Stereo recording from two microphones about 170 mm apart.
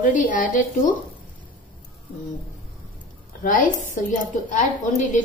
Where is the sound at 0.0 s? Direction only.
50° left (ahead or behind).